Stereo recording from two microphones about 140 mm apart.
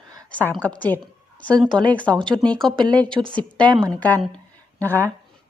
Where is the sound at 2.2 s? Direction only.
35° right (ahead or behind).